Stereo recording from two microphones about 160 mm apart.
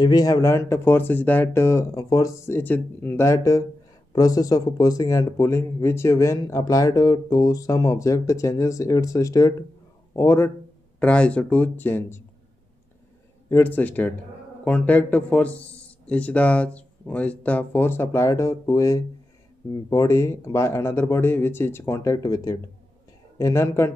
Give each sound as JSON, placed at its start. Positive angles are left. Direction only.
{"t": 0.0, "sound": "a man's voice", "side_deg": 25}
{"t": 13.5, "sound": "a man's voice", "side_deg": 10}